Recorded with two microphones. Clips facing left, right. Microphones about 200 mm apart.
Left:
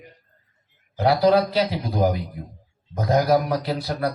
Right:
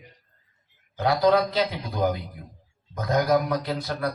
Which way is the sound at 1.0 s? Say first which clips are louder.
Left 3 dB; 30° left (ahead or behind).